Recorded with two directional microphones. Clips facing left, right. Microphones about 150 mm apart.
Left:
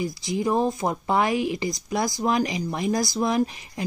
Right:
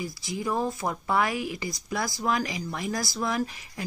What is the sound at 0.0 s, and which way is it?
Speech, 20° left (ahead or behind).